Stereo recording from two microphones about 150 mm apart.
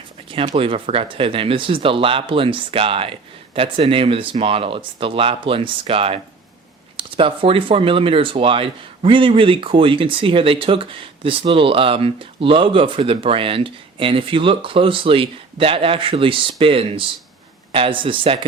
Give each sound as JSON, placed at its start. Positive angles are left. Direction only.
{"t": 0.4, "sound": "speech", "side_deg": -40}